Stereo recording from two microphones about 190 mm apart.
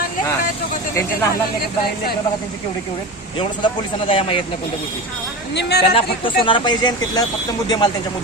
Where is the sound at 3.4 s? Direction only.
25° left (ahead or behind).